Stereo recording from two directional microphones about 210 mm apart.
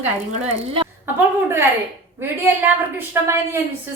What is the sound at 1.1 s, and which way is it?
A woman's voice, 10° right (ahead or behind).